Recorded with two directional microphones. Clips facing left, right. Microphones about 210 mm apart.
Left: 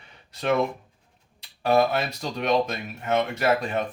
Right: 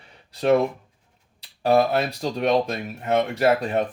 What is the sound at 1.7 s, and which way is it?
Speech, 35° right (ahead or behind).